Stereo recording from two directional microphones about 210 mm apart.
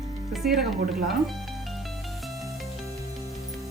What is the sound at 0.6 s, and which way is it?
Speech, 45° right (ahead or behind).